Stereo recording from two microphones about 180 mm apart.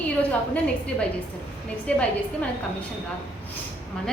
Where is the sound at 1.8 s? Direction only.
5° left (ahead or behind).